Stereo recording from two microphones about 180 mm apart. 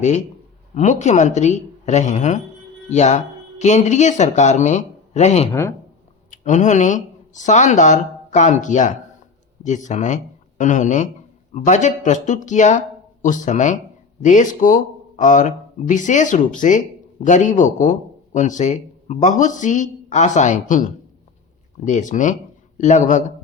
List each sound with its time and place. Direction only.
0.7 s speech: 40° left (ahead or behind)